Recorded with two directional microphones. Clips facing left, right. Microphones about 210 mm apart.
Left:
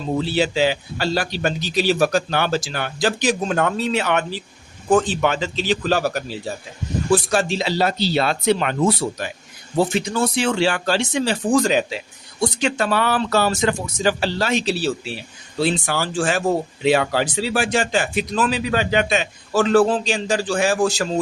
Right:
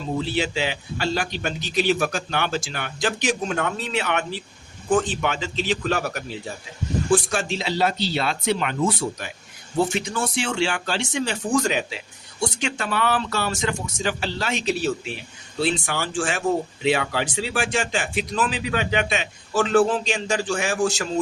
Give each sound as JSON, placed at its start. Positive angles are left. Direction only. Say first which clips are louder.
{"t": 0.2, "sound": "speech", "louder": "left 7 dB", "side_deg": 35}